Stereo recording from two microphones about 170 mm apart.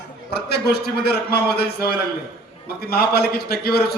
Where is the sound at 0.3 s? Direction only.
70° left (ahead or behind).